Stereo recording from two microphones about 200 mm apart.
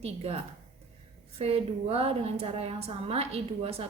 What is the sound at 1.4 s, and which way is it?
A woman's voice, 30° right (ahead or behind).